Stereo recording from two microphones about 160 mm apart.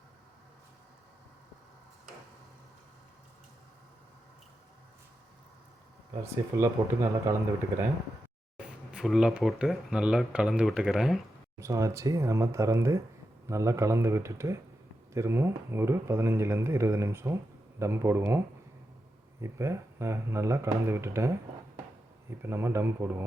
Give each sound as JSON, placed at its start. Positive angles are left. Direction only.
{"t": 6.2, "sound": "speech", "side_deg": -20}
{"t": 8.6, "sound": "speech", "side_deg": -5}
{"t": 11.6, "sound": "speech", "side_deg": -20}